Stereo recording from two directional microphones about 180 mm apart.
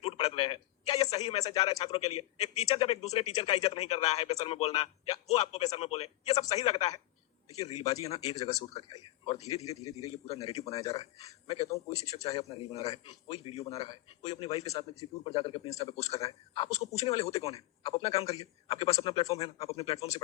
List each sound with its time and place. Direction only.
0.0 s a sound: 35° left (ahead or behind)
1.4 s speech: 20° left (ahead or behind)
1.8 s a man's voice: 35° left (ahead or behind)
9.6 s speech: 20° left (ahead or behind)
10.2 s a man's voice: 35° left (ahead or behind)